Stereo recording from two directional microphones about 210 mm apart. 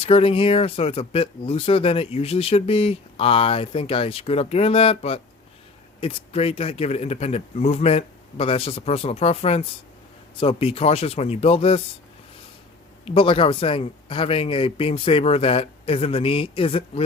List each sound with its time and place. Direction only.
0.0 s speech: 25° left (ahead or behind)
13.1 s speech: 25° left (ahead or behind)